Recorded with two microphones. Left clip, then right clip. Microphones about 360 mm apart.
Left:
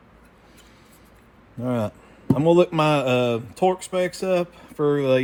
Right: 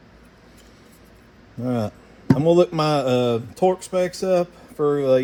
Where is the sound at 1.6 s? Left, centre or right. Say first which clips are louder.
Even; centre.